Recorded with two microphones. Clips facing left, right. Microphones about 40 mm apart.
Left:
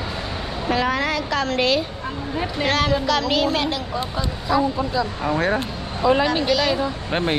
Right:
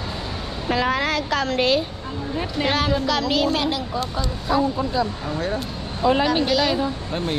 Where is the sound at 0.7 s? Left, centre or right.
Left.